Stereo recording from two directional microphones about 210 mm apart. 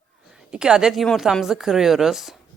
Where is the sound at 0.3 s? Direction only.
5° right (ahead or behind).